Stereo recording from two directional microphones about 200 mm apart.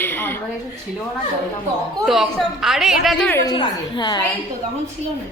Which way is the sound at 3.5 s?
25° left (ahead or behind).